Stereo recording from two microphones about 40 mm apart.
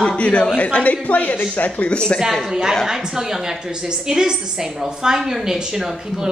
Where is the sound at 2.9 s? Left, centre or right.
Centre.